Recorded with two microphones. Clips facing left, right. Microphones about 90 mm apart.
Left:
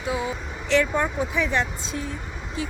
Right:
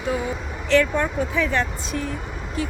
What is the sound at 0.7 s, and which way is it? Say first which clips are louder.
Speech: right 2 dB; 20° left (ahead or behind).